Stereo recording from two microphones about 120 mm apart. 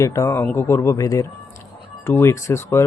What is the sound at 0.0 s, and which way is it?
Speech, 25° left (ahead or behind).